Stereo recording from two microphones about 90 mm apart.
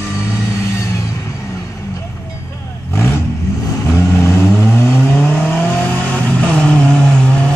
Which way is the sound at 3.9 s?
30° left (ahead or behind).